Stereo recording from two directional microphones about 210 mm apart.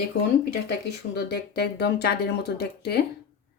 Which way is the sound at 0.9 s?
50° left (ahead or behind).